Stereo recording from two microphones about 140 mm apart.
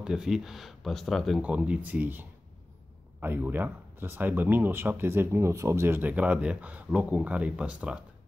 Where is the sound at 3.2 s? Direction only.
15° right (ahead or behind).